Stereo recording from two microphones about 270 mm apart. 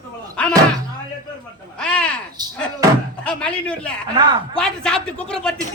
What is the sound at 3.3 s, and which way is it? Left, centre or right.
Speech, centre.